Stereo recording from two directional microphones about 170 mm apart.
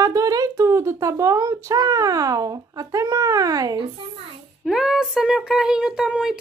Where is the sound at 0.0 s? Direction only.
20° right (ahead or behind).